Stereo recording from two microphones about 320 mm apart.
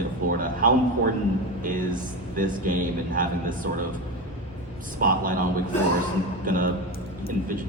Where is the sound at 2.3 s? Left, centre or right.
Right.